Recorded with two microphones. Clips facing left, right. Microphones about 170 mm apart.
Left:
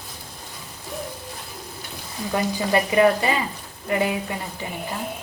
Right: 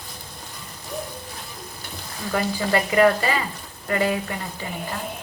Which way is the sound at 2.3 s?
20° left (ahead or behind).